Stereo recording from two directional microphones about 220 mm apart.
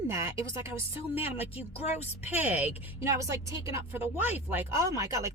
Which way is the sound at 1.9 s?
30° left (ahead or behind).